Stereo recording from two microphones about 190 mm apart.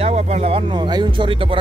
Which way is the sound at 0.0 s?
35° right (ahead or behind).